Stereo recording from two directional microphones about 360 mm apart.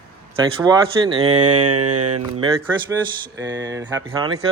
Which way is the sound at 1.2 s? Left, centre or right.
Right.